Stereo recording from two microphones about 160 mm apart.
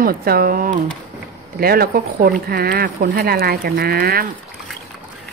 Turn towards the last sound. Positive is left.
turn(degrees=-70)  # may be behind; listen again after turning